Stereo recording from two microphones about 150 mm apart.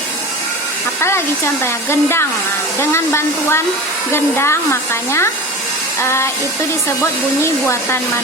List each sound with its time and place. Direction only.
1.6 s speech: 15° left (ahead or behind)
7.4 s speech: 15° left (ahead or behind)